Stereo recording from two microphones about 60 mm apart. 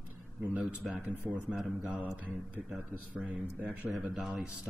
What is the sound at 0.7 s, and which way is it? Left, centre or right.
Speech, right.